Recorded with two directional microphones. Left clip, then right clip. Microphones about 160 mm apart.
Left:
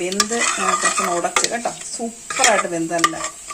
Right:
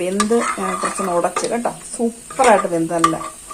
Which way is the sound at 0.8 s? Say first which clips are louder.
Even; centre (ahead or behind).